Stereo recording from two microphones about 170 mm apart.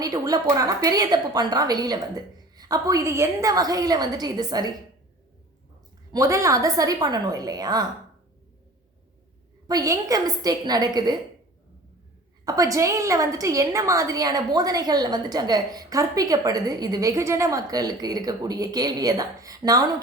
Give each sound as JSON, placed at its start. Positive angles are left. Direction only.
{"t": 0.0, "sound": "a woman's voice", "side_deg": -20}
{"t": 6.1, "sound": "a woman's voice", "side_deg": -20}
{"t": 9.6, "sound": "a woman's voice", "side_deg": -20}
{"t": 12.5, "sound": "a woman's voice", "side_deg": -20}